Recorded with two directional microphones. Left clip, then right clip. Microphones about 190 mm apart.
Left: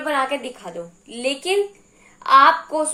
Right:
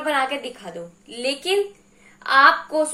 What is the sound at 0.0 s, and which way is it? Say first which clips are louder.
A woman's voice: even; 20° left (ahead or behind).